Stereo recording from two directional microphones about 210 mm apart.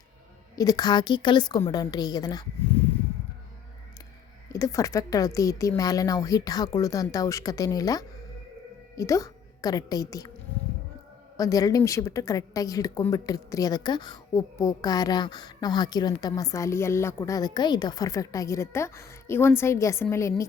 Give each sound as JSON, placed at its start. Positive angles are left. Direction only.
{"t": 0.5, "sound": "a woman's voice", "side_deg": 15}
{"t": 4.5, "sound": "a woman's voice", "side_deg": 15}
{"t": 11.3, "sound": "a woman's voice", "side_deg": 15}